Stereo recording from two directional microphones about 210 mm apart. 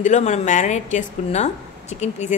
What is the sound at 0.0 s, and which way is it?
A woman's voice, 35° left (ahead or behind).